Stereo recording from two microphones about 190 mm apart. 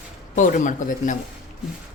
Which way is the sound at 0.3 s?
40° left (ahead or behind).